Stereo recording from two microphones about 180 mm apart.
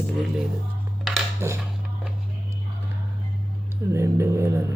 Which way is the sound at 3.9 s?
15° right (ahead or behind).